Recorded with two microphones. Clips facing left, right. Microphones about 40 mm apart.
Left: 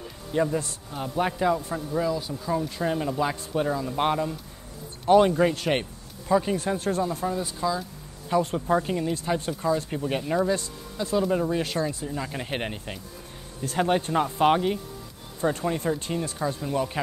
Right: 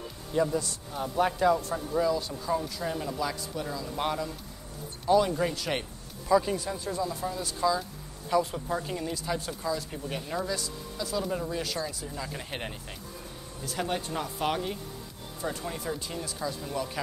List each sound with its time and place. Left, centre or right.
0.3 s speech: left
0.9 s speech: centre
2.7 s speech: left
5.0 s speech: left
5.3 s speech: left
7.2 s speech: left
8.5 s speech: left
10.5 s speech: left